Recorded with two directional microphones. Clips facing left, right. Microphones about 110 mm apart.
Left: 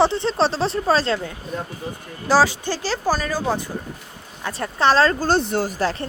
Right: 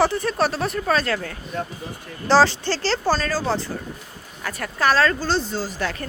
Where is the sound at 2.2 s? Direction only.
10° left (ahead or behind).